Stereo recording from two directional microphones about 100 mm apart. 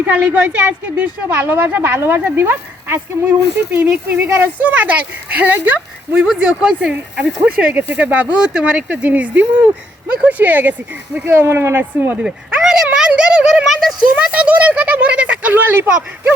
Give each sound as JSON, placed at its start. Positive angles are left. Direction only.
{"t": 0.0, "sound": "a woman's voice", "side_deg": -15}
{"t": 12.2, "sound": "a sound", "side_deg": -5}
{"t": 14.3, "sound": "speech", "side_deg": -15}